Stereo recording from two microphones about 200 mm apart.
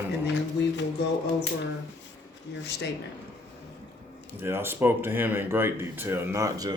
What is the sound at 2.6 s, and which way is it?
Speech, 55° left (ahead or behind).